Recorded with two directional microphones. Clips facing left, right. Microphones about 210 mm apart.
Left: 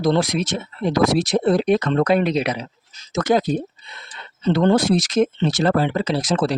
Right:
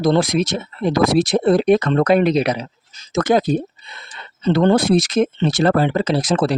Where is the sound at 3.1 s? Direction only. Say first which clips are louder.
Right 2 dB; 55° right (ahead or behind).